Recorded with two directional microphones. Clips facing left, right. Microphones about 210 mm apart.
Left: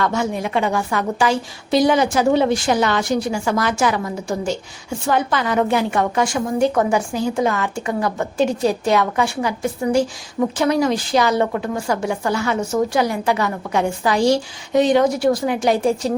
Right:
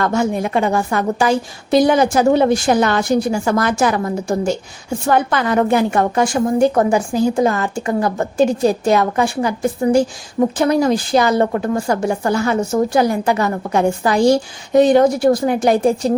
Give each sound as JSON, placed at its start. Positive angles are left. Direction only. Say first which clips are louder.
{"t": 0.0, "sound": "a woman's voice", "louder": "right 3 dB", "side_deg": -45}